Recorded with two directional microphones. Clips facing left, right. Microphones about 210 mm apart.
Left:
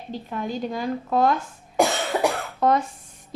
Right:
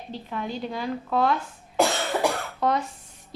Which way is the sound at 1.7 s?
10° left (ahead or behind).